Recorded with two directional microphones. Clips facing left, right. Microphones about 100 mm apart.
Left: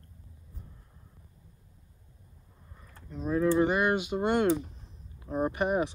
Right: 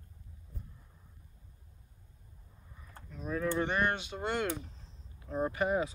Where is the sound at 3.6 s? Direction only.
10° left (ahead or behind).